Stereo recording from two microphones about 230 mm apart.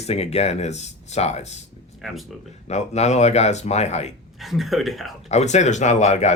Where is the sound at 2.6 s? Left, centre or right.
Left.